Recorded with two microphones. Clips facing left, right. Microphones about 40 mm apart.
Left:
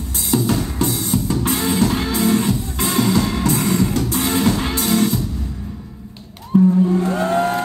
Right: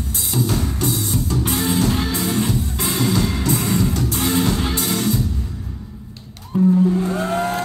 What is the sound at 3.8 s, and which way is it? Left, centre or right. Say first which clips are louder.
Music: left 1 dB; centre.